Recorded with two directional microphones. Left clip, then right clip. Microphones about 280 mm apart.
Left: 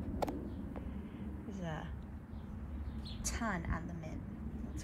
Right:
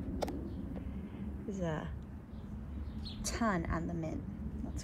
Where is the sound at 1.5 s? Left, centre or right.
Centre.